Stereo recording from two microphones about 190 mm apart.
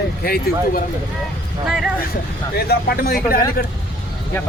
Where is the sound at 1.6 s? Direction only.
5° right (ahead or behind).